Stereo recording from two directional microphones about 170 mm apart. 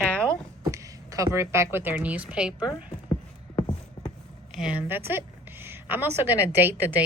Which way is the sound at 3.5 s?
20° left (ahead or behind).